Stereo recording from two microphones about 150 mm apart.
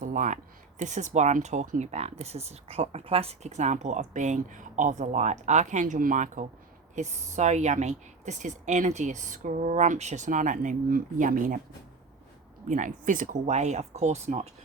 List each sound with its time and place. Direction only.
0.0 s a sound: 60° right (ahead or behind)
0.8 s a woman's voice: 55° right (ahead or behind)
12.6 s speech: 55° right (ahead or behind)